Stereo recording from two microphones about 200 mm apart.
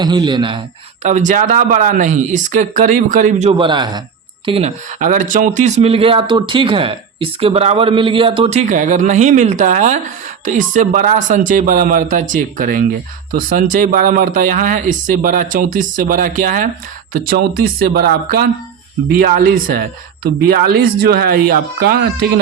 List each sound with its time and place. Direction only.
0.0 s speech: 20° right (ahead or behind)
1.0 s speech: 40° right (ahead or behind)
3.6 s speech: 20° right (ahead or behind); by 22.0 s 50° right (ahead or behind)